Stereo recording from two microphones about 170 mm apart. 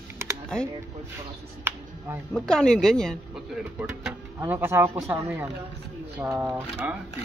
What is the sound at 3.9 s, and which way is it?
Speech, 10° right (ahead or behind).